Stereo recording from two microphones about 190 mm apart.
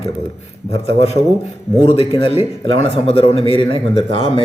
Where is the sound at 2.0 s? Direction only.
30° left (ahead or behind).